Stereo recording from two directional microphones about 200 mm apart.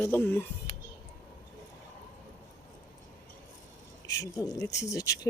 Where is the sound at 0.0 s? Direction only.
10° left (ahead or behind).